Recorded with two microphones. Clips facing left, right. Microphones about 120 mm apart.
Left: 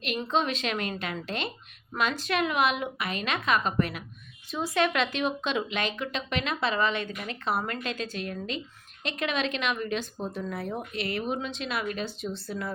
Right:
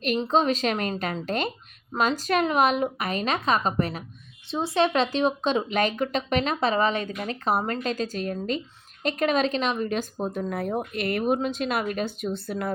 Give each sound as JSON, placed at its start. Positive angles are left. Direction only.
{"t": 0.2, "sound": "speech", "side_deg": -35}